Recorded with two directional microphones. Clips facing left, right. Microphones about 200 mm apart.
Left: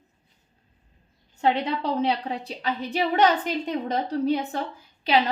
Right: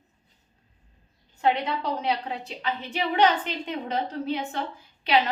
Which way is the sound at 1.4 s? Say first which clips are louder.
Left 1 dB; 30° left (ahead or behind).